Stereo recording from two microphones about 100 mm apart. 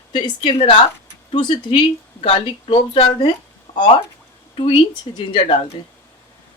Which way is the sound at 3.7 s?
50° left (ahead or behind).